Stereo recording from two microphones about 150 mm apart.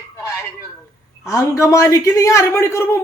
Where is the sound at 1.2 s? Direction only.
20° left (ahead or behind).